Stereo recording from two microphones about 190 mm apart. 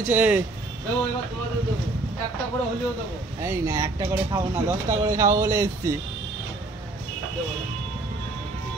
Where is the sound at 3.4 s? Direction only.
15° right (ahead or behind).